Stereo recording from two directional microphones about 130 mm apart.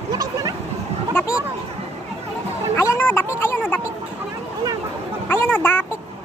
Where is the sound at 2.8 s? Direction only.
15° left (ahead or behind).